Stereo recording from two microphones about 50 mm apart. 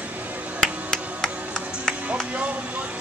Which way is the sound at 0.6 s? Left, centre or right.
Centre.